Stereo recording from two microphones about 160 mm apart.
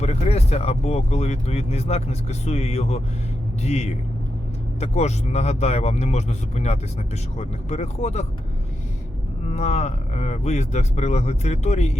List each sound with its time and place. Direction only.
0.0 s speech: 40° left (ahead or behind)
9.5 s speech: 45° left (ahead or behind)